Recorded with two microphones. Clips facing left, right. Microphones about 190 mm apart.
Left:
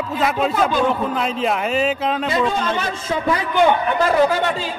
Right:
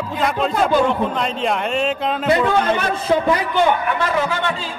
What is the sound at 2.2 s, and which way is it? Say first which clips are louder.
Speech: right 6 dB; 60° right (ahead or behind).